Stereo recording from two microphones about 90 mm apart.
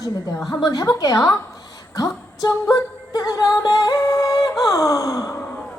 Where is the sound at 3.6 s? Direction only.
40° left (ahead or behind).